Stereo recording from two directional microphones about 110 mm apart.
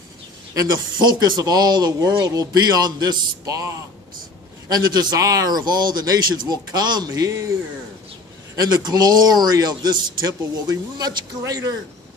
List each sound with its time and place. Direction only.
1.0 s a man's voice: 40° right (ahead or behind)
8.5 s a man's voice: 35° right (ahead or behind)